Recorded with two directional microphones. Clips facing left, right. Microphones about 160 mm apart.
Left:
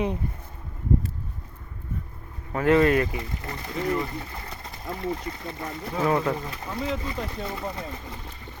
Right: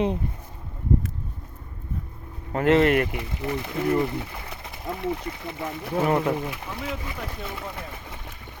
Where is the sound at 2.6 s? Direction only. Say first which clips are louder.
Right 1 dB; 25° right (ahead or behind).